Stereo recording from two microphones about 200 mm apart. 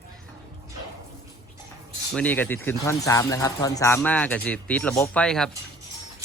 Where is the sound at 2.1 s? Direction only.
5° left (ahead or behind).